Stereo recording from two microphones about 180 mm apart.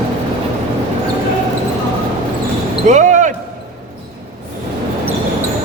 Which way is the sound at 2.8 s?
40° right (ahead or behind).